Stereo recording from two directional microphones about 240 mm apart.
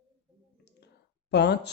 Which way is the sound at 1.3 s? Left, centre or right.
Left.